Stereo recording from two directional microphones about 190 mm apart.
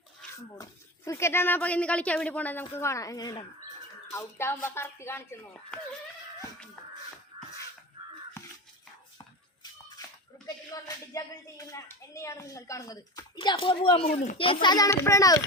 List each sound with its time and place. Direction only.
0.6 s speech: 15° left (ahead or behind)
7.3 s a sound: 20° right (ahead or behind)
10.4 s speech: 20° left (ahead or behind)